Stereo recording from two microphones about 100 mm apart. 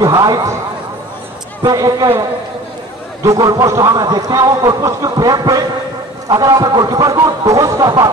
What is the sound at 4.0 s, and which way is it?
Speech, 45° right (ahead or behind).